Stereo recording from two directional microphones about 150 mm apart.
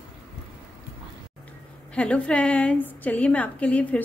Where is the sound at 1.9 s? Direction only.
5° left (ahead or behind).